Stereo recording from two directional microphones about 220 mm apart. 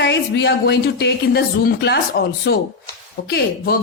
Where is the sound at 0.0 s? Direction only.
50° left (ahead or behind).